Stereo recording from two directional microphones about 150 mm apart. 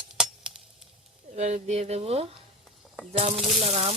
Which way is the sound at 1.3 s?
50° right (ahead or behind).